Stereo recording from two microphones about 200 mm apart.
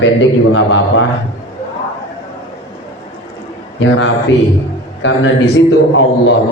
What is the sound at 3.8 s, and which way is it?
A man's voice, 75° left (ahead or behind).